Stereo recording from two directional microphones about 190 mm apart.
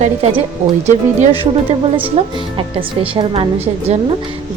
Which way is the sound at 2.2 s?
30° right (ahead or behind).